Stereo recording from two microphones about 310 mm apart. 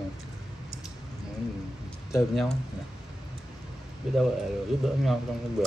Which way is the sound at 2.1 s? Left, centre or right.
Centre.